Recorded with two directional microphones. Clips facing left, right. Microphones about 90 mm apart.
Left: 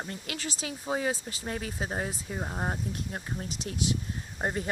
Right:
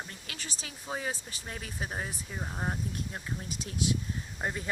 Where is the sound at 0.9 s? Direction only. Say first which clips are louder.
Left 6 dB; 15° left (ahead or behind).